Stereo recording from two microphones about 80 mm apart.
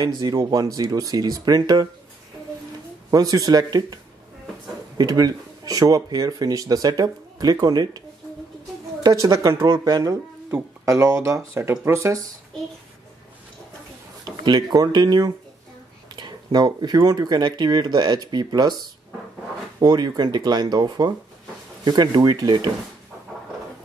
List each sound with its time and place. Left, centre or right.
0.0 s speech: right
3.1 s speech: right
9.0 s speech: right
9.6 s speech: right
10.9 s speech: right
14.2 s speech: right
19.8 s speech: right